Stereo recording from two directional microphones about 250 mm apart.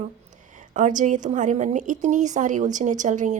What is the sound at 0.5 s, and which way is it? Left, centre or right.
A woman's voice, right.